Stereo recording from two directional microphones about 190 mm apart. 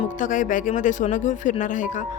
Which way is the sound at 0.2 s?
45° left (ahead or behind).